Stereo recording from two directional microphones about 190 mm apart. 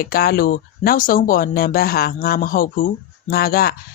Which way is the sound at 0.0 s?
50° left (ahead or behind).